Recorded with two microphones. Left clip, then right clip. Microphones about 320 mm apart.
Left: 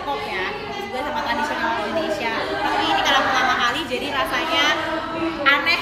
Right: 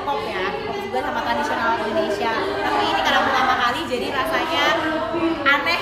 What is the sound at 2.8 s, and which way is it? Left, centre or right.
Chatter, right.